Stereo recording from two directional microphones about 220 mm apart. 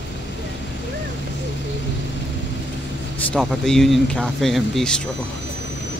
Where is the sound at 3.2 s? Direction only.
Centre (ahead or behind).